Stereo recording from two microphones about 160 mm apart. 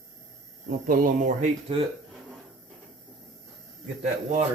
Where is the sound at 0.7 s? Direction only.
65° right (ahead or behind).